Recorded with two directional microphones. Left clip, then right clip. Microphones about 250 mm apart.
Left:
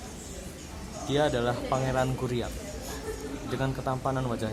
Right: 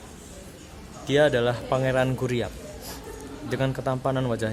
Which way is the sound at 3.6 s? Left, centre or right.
Right.